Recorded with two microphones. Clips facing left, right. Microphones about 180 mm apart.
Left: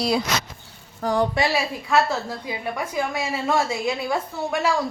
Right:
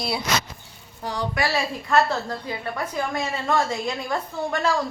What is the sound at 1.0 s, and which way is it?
Speech, 50° left (ahead or behind).